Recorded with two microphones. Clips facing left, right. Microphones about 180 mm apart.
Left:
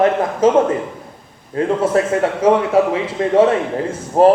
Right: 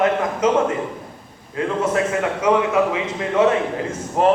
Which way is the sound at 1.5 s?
35° left (ahead or behind).